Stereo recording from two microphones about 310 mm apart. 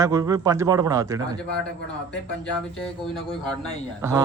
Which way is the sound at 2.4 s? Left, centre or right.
Centre.